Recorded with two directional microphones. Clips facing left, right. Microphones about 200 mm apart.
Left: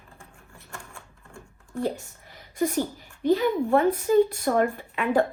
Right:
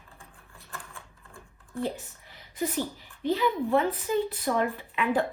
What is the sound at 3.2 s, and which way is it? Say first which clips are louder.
A woman's voice: left 4 dB; 50° left (ahead or behind).